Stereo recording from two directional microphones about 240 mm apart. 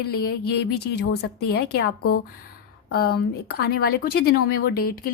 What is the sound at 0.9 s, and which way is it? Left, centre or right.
Speech, left.